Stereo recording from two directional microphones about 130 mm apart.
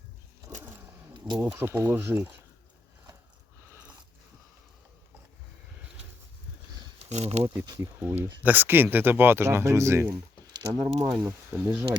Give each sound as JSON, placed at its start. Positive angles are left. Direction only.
{"t": 1.5, "sound": "speech", "side_deg": -20}
{"t": 7.1, "sound": "speech", "side_deg": -60}
{"t": 7.5, "sound": "speech", "side_deg": -30}
{"t": 7.8, "sound": "speech", "side_deg": -20}
{"t": 10.4, "sound": "a sound", "side_deg": -30}
{"t": 11.2, "sound": "speech", "side_deg": -20}